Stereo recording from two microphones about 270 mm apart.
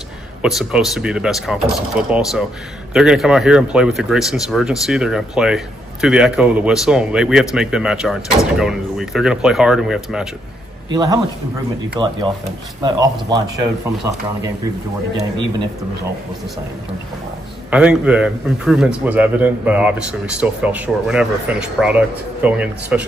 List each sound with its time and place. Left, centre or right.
0.4 s speech: centre
10.9 s speech: centre
12.8 s speech: centre
17.6 s speech: centre